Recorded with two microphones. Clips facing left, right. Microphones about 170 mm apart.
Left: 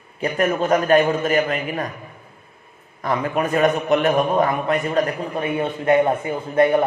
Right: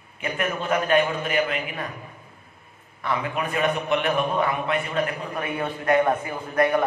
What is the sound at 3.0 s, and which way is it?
A man's voice, 45° left (ahead or behind).